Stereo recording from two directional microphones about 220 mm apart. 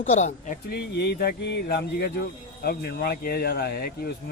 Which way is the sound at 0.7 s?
45° left (ahead or behind).